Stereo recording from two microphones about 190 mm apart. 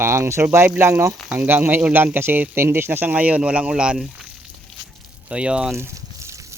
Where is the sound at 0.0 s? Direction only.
15° right (ahead or behind).